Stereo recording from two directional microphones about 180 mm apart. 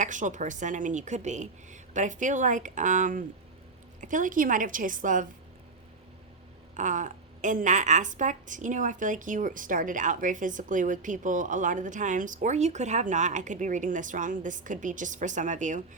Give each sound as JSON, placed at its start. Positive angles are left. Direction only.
{"t": 0.0, "sound": "a woman's voice", "side_deg": -45}
{"t": 6.7, "sound": "a woman's voice", "side_deg": -45}